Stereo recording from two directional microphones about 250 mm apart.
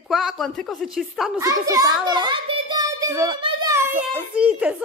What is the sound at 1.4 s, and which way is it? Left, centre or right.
A child's voice, centre.